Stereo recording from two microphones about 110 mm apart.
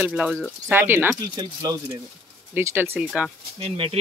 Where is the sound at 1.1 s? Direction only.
40° right (ahead or behind).